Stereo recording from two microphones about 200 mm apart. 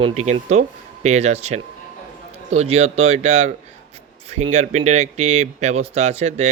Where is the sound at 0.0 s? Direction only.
35° right (ahead or behind).